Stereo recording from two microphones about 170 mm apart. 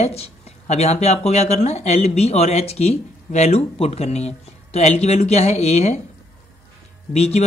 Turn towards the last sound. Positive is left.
turn(degrees=40)  # may be behind; listen again after turning